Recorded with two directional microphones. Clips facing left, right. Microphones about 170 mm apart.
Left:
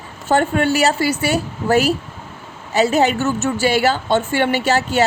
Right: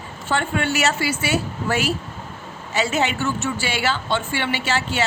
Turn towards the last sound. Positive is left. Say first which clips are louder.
# left 7 dB
turn(degrees=40)  # may be behind; listen again after turning